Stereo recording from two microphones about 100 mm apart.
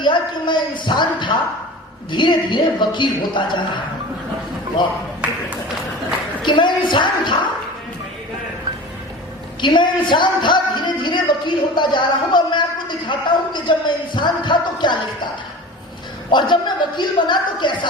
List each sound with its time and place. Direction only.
0.0 s speech: 50° left (ahead or behind)
6.4 s speech: 50° left (ahead or behind)
9.6 s speech: 50° left (ahead or behind)
16.3 s speech: 50° left (ahead or behind)